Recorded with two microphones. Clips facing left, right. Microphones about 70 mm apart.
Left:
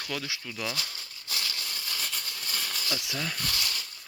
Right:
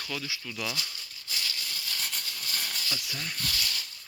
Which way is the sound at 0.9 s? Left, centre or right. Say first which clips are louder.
Left 1 dB; left.